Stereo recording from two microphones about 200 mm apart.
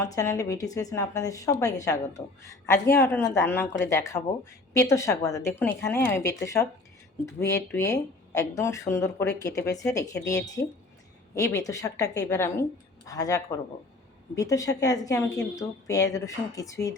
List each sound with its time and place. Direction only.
0.0 s a woman's voice: 15° left (ahead or behind)